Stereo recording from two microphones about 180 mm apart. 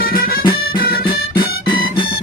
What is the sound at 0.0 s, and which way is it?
Music, 55° left (ahead or behind).